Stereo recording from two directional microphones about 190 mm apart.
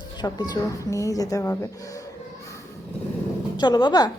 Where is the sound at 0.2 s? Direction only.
20° left (ahead or behind).